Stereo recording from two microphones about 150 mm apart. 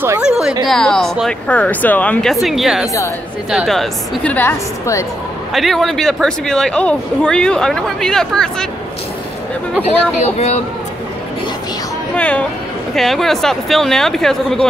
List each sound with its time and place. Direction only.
0.2 s speech: 5° right (ahead or behind)
2.4 s speech: centre (ahead or behind); by 5.0 s 15° left (ahead or behind)
5.5 s speech: centre (ahead or behind)
10.2 s speech: 45° left (ahead or behind)
12.2 s speech: 10° left (ahead or behind)